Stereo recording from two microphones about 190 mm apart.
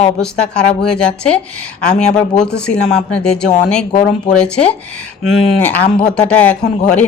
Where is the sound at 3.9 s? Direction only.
25° left (ahead or behind).